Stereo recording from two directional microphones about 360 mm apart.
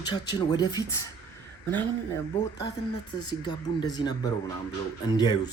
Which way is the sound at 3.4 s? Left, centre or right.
Centre.